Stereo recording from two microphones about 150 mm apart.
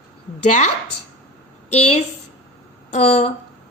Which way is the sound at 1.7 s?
45° left (ahead or behind).